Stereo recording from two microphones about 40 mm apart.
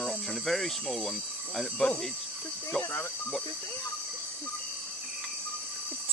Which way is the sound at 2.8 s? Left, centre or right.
Left.